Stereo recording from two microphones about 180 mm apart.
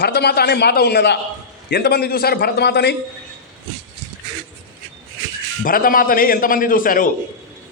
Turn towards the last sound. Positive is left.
turn(degrees=50)  # may be behind; listen again after turning